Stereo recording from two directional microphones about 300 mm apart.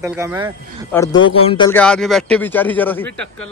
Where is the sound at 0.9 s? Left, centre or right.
Centre.